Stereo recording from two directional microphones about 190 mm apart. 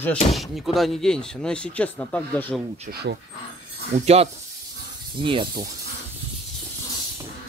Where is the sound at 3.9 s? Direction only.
35° right (ahead or behind).